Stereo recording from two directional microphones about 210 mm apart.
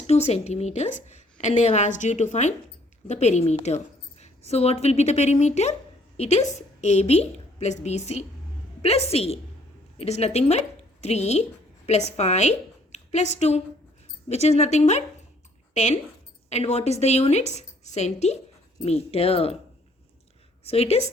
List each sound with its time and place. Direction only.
0.1 s a woman's voice: 30° left (ahead or behind)
20.7 s speech: 30° left (ahead or behind)